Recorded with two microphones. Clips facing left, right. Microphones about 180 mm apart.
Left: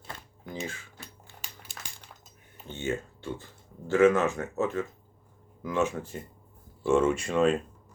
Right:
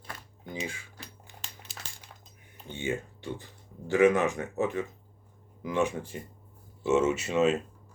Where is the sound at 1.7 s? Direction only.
Centre (ahead or behind).